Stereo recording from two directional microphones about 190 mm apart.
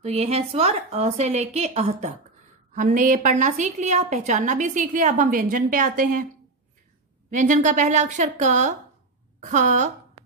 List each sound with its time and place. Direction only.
0.0 s a woman's voice: 35° right (ahead or behind)
7.2 s a woman's voice: 40° right (ahead or behind)